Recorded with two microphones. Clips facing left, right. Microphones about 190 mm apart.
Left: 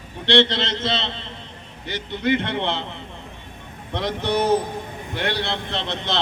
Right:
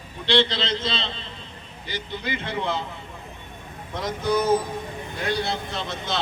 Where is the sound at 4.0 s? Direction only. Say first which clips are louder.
Left 1 dB; 65° left (ahead or behind).